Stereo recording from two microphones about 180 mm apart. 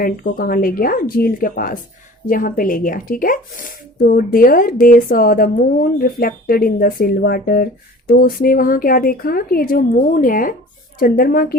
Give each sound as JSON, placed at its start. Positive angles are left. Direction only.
{"t": 0.0, "sound": "speech", "side_deg": 55}